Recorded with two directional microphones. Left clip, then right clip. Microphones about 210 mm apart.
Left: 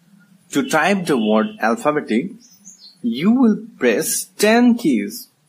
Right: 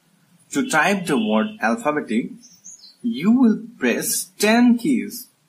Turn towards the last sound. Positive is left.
turn(degrees=40)  # may be behind; listen again after turning